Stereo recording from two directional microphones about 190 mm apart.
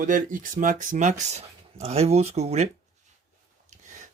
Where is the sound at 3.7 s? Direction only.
40° right (ahead or behind).